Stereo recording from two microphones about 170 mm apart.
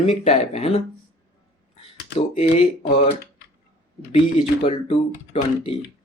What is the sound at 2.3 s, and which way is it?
Speech, 35° left (ahead or behind).